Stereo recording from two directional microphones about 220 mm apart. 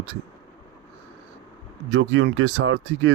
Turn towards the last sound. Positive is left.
turn(degrees=-60)  # may be behind; listen again after turning